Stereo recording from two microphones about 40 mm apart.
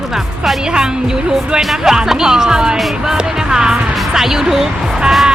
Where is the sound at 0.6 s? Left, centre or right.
Centre.